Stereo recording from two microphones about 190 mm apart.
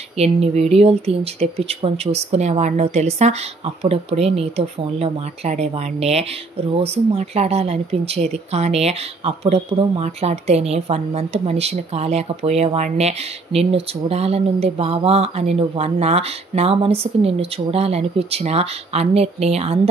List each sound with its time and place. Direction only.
0.2 s speech: 35° right (ahead or behind)